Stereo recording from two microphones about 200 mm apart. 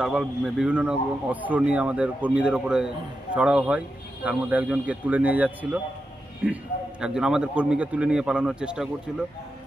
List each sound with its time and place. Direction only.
0.0 s a man's voice: 5° right (ahead or behind)